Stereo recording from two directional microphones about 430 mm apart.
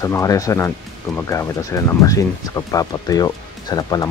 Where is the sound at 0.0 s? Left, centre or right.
Centre.